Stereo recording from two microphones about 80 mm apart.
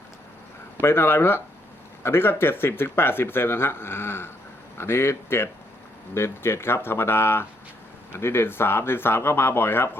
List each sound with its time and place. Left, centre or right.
0.8 s speech: left